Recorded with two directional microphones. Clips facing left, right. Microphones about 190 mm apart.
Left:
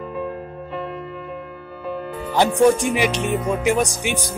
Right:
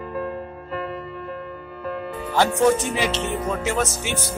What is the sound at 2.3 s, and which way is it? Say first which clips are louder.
Music: left 3 dB; 15° left (ahead or behind).